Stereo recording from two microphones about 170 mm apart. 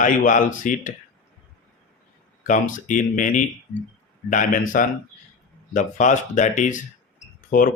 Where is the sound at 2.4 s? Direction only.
50° left (ahead or behind).